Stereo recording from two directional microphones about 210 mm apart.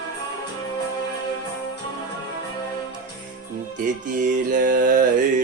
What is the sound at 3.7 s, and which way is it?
Music, 40° right (ahead or behind).